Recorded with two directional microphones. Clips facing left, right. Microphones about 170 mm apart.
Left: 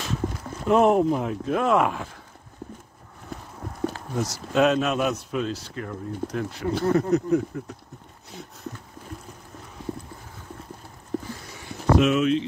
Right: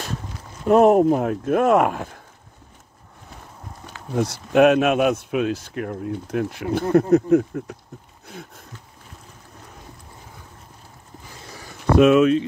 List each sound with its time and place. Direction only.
0.7 s speech: 40° right (ahead or behind)
4.1 s a man's voice: 60° right (ahead or behind)
11.1 s a sound: 75° left (ahead or behind)
12.0 s a man's voice: 55° right (ahead or behind)